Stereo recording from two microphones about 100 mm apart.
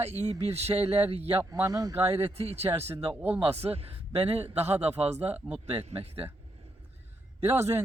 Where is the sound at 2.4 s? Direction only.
90° right.